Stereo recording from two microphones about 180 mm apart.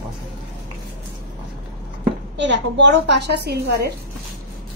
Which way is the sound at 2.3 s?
80° right.